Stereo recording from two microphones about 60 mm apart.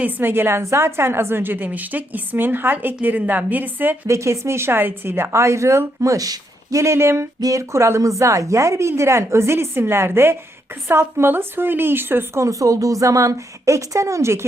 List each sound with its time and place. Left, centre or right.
0.0 s a woman's voice: right
4.0 s speech: right
7.4 s a woman's voice: right
12.4 s a woman's voice: right